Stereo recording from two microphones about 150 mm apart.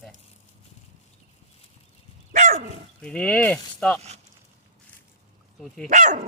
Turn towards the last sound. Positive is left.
turn(degrees=-55)  # may be behind; listen again after turning